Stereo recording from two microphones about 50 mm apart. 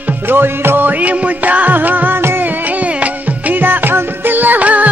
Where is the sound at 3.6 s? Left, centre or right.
Right.